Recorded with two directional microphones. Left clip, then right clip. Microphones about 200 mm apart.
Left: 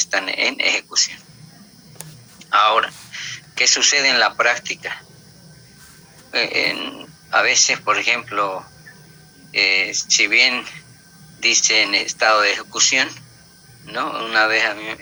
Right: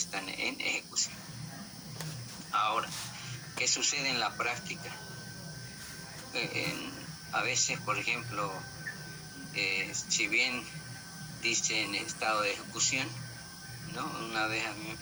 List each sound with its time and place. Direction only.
0.1 s speech: 45° left (ahead or behind)
2.5 s speech: 45° left (ahead or behind)
6.3 s speech: 50° left (ahead or behind)
9.6 s speech: 50° left (ahead or behind)